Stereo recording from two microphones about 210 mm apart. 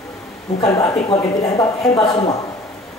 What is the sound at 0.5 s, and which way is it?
Speech, 15° left (ahead or behind).